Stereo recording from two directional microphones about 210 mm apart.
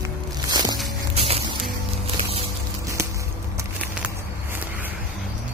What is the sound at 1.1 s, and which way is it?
Music, 30° right (ahead or behind).